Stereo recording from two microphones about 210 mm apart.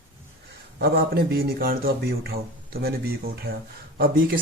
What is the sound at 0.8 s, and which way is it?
Speech, 45° right (ahead or behind).